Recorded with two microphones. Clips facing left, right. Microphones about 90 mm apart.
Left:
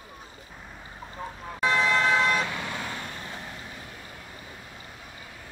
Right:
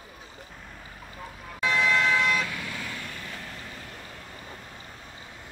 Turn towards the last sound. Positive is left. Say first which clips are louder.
# left 1 dB
turn(degrees=25)  # may be behind; listen again after turning